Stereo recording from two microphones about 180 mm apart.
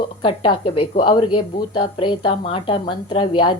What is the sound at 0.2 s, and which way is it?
A woman's voice, 30° left (ahead or behind).